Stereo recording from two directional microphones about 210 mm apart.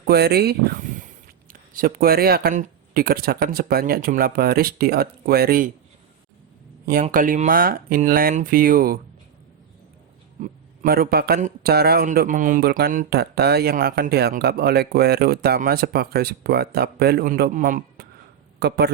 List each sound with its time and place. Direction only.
0.0 s a man's voice: 50° right (ahead or behind)
7.0 s a man's voice: 40° right (ahead or behind)
10.4 s a man's voice: 45° right (ahead or behind)